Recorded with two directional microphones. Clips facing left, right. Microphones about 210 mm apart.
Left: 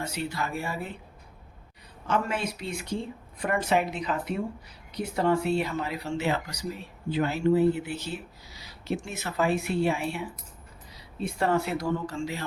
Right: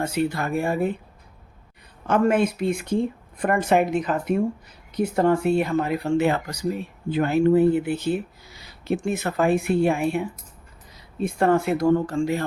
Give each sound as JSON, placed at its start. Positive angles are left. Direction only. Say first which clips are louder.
{"t": 0.0, "sound": "speech", "louder": "right 8 dB", "side_deg": -55}
{"t": 2.0, "sound": "speech", "louder": "right 9 dB", "side_deg": -50}